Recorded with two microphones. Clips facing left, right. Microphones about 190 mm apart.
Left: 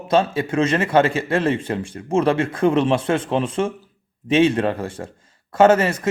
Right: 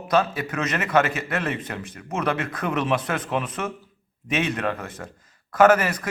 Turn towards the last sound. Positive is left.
turn(degrees=25)  # may be behind; listen again after turning